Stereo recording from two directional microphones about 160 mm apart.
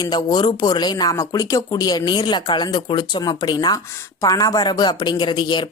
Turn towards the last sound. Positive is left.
turn(degrees=30)  # may be behind; listen again after turning